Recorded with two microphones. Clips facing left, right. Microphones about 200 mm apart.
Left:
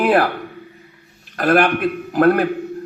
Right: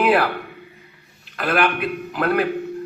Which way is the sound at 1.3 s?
45° left (ahead or behind).